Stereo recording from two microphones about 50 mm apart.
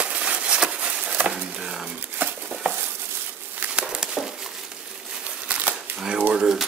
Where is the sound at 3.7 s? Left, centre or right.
Centre.